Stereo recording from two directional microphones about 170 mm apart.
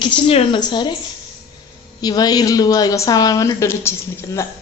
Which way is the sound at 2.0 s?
25° left (ahead or behind).